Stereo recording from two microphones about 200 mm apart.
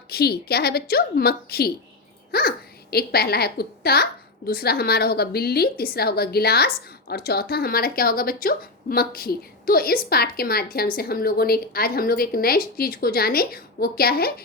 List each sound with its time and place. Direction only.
0.1 s a woman's voice: 50° left (ahead or behind)